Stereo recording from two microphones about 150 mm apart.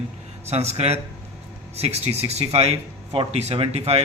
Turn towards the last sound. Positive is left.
turn(degrees=-40)  # may be behind; listen again after turning